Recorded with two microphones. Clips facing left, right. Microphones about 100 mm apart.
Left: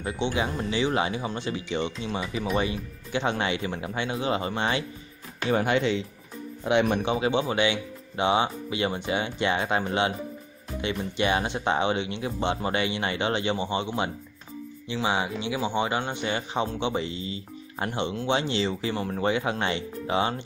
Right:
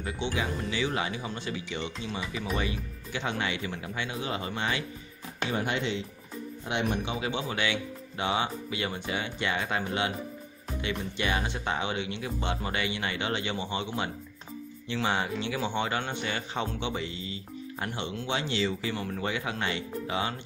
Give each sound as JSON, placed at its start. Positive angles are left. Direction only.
{"t": 0.0, "sound": "speech", "side_deg": 25}
{"t": 5.5, "sound": "speech", "side_deg": 90}
{"t": 7.1, "sound": "speech", "side_deg": 30}